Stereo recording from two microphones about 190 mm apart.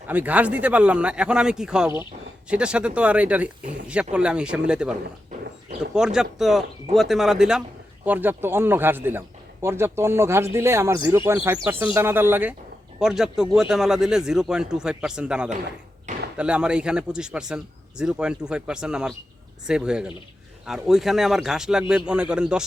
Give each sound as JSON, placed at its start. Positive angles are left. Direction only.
{"t": 0.1, "sound": "a man's voice", "side_deg": -10}
{"t": 16.1, "sound": "a sound", "side_deg": -40}
{"t": 16.4, "sound": "a man's voice", "side_deg": -5}